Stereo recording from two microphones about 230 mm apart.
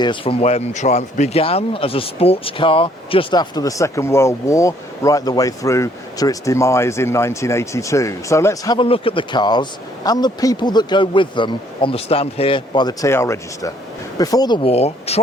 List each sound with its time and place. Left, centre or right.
0.0 s speech: left